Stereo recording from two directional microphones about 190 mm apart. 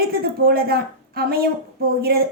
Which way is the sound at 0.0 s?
55° right (ahead or behind).